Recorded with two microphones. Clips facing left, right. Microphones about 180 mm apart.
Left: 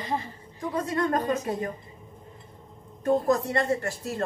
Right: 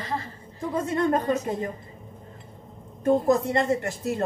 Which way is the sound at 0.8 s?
25° right (ahead or behind).